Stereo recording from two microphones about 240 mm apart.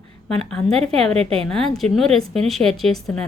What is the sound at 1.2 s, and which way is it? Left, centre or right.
Speech, right.